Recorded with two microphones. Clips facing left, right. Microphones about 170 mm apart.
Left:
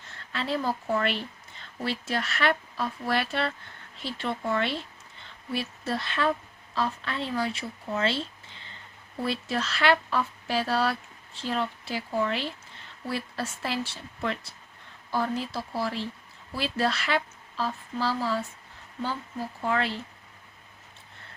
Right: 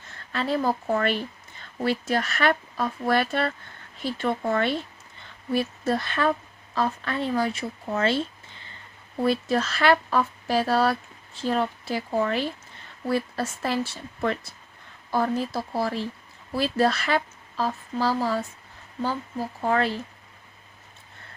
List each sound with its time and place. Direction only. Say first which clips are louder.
0.3 s speech: right 4 dB; 45° right (ahead or behind)
19.6 s speech: right 4 dB; 40° right (ahead or behind)